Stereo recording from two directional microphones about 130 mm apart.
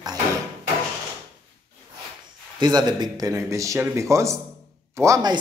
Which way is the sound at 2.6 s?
30° right (ahead or behind).